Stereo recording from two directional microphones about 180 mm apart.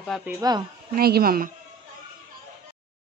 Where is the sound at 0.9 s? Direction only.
55° right (ahead or behind).